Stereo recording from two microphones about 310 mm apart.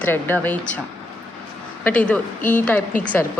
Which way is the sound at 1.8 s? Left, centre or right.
Centre.